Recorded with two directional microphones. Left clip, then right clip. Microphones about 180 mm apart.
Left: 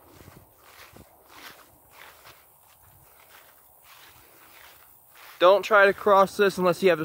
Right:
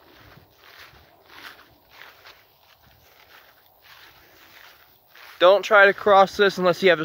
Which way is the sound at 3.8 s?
50° right (ahead or behind).